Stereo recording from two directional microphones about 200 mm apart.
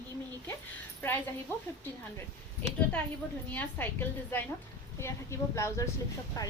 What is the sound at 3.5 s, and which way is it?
A woman's voice, 10° left (ahead or behind).